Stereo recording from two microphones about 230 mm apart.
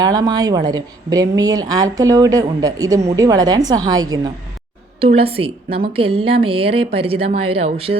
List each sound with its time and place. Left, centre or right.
0.0 s a woman's voice: centre